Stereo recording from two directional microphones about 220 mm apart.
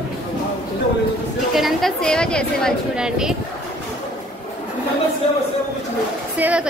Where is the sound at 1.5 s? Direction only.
Centre (ahead or behind).